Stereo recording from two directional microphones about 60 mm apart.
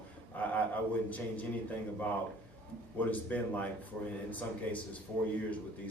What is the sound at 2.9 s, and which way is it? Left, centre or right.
Speech, left.